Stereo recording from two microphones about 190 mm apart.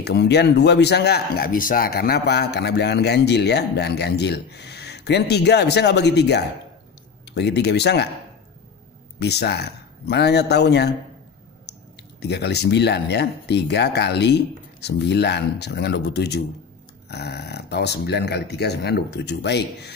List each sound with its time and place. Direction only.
0.0 s speech: 60° left (ahead or behind)
9.2 s speech: 60° left (ahead or behind)
12.2 s speech: 60° left (ahead or behind)